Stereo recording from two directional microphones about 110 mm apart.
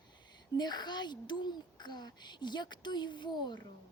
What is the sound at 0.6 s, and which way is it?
A child's voice, 40° left (ahead or behind).